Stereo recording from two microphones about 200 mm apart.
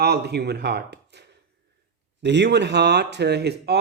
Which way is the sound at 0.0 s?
55° right (ahead or behind).